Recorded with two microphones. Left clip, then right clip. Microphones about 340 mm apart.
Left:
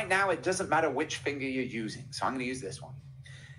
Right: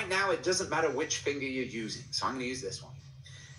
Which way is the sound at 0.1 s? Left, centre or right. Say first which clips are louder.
Left 2 dB; left.